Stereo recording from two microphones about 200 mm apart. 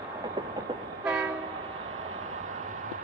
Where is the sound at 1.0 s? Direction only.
10° right (ahead or behind).